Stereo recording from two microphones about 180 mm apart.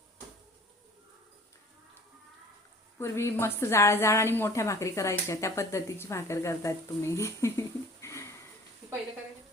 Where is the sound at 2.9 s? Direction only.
15° left (ahead or behind).